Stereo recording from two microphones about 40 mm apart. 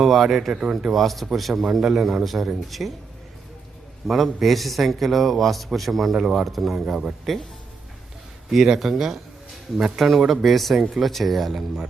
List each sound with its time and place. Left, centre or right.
0.0 s a man's voice: centre
0.7 s speech: centre
0.9 s a man's voice: centre
4.0 s a man's voice: centre
8.4 s speech: centre
9.7 s a man's voice: right
10.2 s speech: centre
10.4 s a man's voice: centre